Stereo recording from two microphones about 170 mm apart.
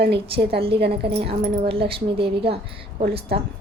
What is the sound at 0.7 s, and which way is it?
Speech, 75° right (ahead or behind).